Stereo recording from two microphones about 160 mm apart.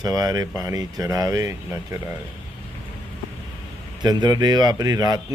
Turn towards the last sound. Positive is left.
turn(degrees=-25)  # may be behind; listen again after turning